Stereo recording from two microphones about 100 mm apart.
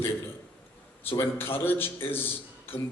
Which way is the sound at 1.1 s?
25° left (ahead or behind).